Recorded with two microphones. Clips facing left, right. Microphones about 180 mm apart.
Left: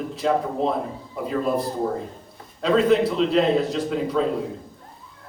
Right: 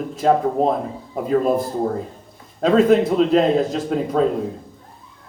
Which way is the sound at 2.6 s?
45° right (ahead or behind).